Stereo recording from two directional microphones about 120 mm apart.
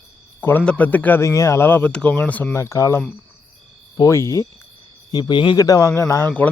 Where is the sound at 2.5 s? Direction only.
25° left (ahead or behind).